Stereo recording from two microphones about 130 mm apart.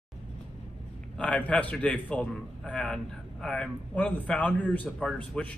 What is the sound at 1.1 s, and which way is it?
A man's voice, 5° left (ahead or behind).